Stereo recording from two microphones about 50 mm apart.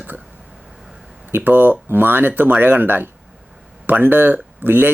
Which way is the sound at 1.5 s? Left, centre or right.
Right.